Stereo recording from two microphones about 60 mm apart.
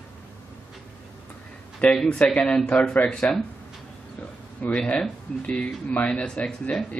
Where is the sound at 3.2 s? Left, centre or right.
Left.